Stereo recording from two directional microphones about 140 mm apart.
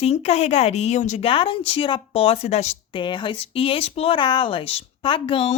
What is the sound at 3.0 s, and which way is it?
Speech, 35° left (ahead or behind).